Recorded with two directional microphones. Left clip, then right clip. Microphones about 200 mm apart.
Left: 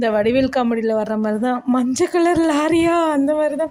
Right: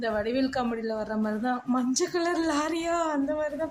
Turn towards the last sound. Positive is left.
turn(degrees=40)  # may be behind; listen again after turning